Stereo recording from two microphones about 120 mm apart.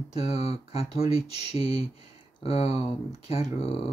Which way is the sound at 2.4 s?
60° left (ahead or behind).